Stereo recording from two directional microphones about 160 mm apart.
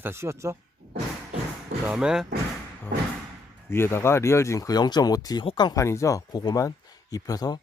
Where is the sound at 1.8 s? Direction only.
5° right (ahead or behind).